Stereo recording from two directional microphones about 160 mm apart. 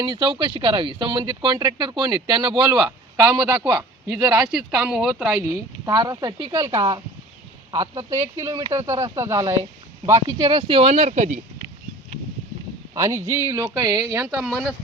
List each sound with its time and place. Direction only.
0.0 s speech: 30° right (ahead or behind)
3.2 s speech: 10° right (ahead or behind)
3.4 s speech: 25° right (ahead or behind)
4.1 s speech: 10° right (ahead or behind)
5.5 s speech: 20° right (ahead or behind)
7.7 s speech: 35° right (ahead or behind)
8.4 s speech: 20° right (ahead or behind)
10.6 s speech: 35° right (ahead or behind)
12.9 s speech: 20° right (ahead or behind)
14.4 s speech: centre (ahead or behind)